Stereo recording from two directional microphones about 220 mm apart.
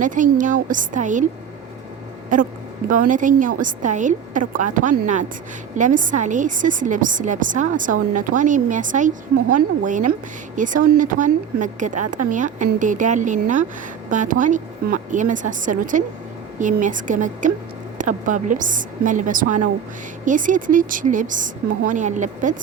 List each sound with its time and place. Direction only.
0.0 s a woman's voice: 35° right (ahead or behind)
2.3 s a woman's voice: 35° right (ahead or behind)